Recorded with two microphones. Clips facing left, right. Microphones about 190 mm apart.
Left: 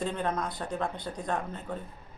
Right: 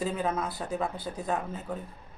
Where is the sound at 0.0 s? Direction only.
5° right (ahead or behind).